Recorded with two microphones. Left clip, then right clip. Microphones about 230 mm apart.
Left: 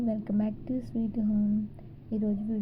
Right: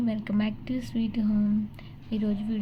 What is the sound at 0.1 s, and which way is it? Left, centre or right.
A woman's voice, centre.